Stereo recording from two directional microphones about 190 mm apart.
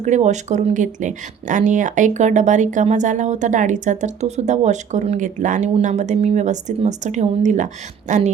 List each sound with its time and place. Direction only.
0.0 s speech: 40° right (ahead or behind)